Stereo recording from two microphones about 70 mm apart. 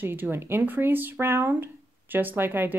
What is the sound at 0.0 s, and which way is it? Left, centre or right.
Speech, right.